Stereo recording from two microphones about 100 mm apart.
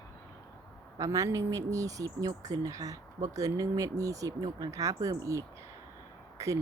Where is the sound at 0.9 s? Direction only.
35° right (ahead or behind).